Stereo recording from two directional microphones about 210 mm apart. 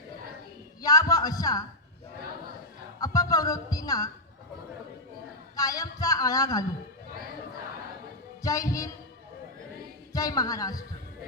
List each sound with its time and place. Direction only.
0.8 s a man's voice: 15° left (ahead or behind)
3.0 s speech: 15° left (ahead or behind)
5.5 s speech: 15° left (ahead or behind)
8.4 s speech: 15° left (ahead or behind)
10.1 s a man's voice: 15° left (ahead or behind)